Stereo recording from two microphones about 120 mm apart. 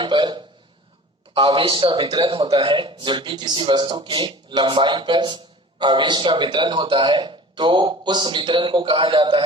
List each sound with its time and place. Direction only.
0.0 s a man's voice: 40° right (ahead or behind)